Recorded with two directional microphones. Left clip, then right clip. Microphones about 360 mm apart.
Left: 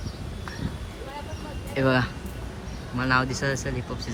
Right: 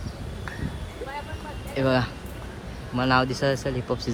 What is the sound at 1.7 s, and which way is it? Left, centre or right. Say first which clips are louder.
Speech: even; centre.